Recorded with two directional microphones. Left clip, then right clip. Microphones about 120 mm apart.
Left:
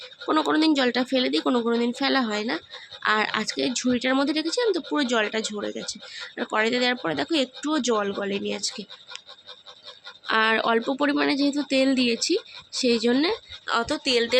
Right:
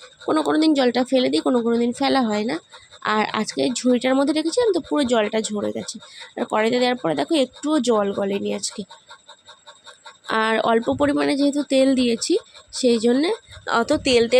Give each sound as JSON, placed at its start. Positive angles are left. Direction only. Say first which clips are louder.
{"t": 0.3, "sound": "speech", "louder": "right 3 dB", "side_deg": -30}
{"t": 1.5, "sound": "speech", "louder": "right 3 dB", "side_deg": -25}
{"t": 10.2, "sound": "speech", "louder": "right 2 dB", "side_deg": -40}
{"t": 13.7, "sound": "a woman's voice", "louder": "right 5 dB", "side_deg": -55}